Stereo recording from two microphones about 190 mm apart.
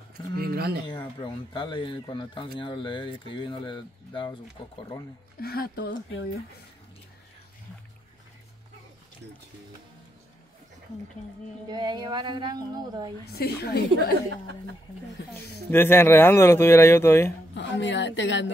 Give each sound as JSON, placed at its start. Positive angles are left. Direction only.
{"t": 0.4, "sound": "speech", "side_deg": -55}
{"t": 0.8, "sound": "speech", "side_deg": 25}
{"t": 5.4, "sound": "speech", "side_deg": 55}
{"t": 11.7, "sound": "a sound", "side_deg": -25}
{"t": 13.3, "sound": "a woman's voice", "side_deg": 55}
{"t": 15.3, "sound": "speech", "side_deg": 10}
{"t": 17.6, "sound": "a woman's voice", "side_deg": 70}